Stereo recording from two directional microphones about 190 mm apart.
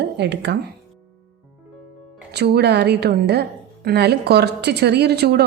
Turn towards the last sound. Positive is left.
turn(degrees=-60)  # may be behind; listen again after turning